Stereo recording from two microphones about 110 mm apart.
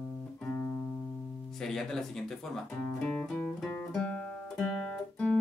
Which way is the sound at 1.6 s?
5° left (ahead or behind).